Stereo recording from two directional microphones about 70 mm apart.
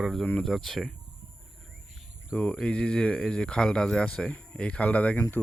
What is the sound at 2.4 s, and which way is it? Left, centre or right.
Speech, centre.